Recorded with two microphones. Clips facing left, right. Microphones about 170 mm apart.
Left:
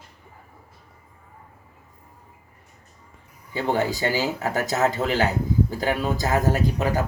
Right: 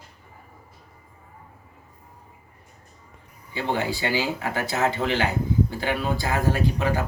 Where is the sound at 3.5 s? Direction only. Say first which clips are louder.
Left 3 dB; 40° left (ahead or behind).